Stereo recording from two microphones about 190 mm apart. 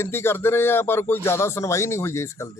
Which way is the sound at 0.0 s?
10° left (ahead or behind).